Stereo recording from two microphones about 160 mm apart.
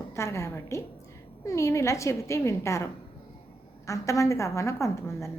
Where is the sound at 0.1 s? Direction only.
15° left (ahead or behind).